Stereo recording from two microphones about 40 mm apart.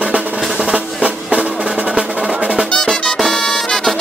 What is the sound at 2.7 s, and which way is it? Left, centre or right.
Music, centre.